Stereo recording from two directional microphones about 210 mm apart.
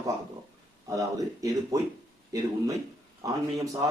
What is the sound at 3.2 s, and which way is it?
Speech, 15° right (ahead or behind).